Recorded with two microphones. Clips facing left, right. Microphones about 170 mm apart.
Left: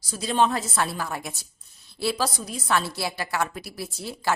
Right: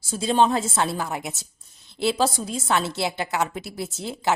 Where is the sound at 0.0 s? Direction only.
25° right (ahead or behind).